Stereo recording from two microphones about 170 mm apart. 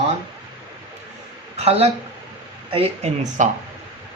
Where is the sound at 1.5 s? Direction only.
35° right (ahead or behind).